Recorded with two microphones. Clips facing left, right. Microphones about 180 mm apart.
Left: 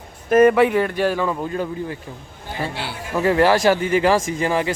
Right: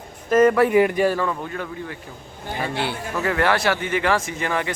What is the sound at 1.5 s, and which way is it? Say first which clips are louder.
Speech: left 5 dB; 30° left (ahead or behind).